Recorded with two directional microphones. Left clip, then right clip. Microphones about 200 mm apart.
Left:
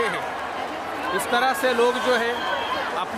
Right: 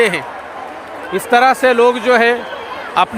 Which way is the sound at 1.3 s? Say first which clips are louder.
Right 11 dB; 45° right (ahead or behind).